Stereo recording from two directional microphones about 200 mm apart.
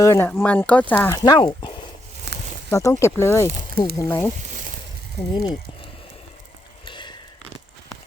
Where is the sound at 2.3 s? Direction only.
55° right (ahead or behind).